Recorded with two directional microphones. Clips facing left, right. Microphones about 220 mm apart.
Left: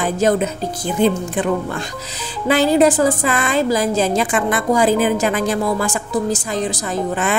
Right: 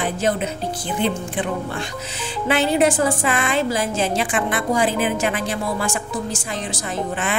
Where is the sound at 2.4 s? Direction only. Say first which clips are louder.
Left 4 dB; 35° left (ahead or behind).